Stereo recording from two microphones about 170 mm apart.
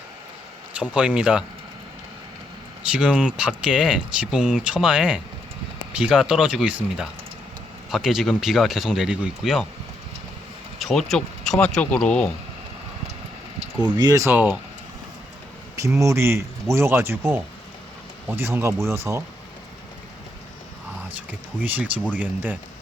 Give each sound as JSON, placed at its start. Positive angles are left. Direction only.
{"t": 0.8, "sound": "speech", "side_deg": -5}
{"t": 2.9, "sound": "speech", "side_deg": -5}
{"t": 7.9, "sound": "speech", "side_deg": 0}
{"t": 10.8, "sound": "speech", "side_deg": 0}
{"t": 13.7, "sound": "speech", "side_deg": -25}
{"t": 16.0, "sound": "speech", "side_deg": -15}
{"t": 21.6, "sound": "speech", "side_deg": -10}